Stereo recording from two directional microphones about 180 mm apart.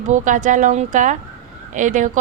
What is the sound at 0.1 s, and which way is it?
A woman's voice, 45° right (ahead or behind).